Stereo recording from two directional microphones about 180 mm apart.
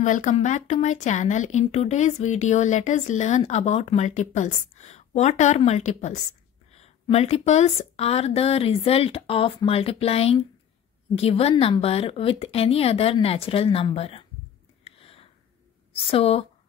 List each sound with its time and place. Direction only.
0.0 s speech: 45° left (ahead or behind)
14.9 s a sound: 30° left (ahead or behind)
15.9 s a woman's voice: 30° left (ahead or behind)